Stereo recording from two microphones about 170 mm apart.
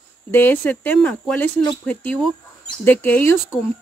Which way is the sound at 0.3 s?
10° left (ahead or behind).